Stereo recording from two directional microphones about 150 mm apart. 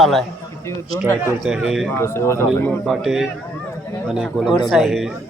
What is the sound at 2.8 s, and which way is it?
A man's voice, centre (ahead or behind).